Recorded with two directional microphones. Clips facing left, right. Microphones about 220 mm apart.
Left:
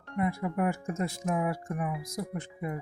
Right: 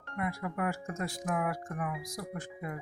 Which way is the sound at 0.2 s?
25° left (ahead or behind).